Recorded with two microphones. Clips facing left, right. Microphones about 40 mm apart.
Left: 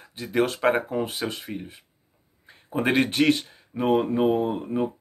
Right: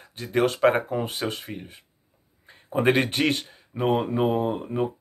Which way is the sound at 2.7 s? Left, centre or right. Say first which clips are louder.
Right 3 dB; centre.